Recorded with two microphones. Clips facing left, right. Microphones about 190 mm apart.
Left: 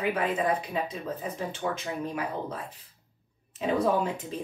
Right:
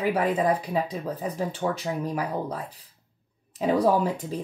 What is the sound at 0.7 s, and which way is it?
Speech, 35° right (ahead or behind).